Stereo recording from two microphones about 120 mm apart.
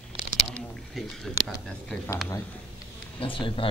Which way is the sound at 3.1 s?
45° left (ahead or behind).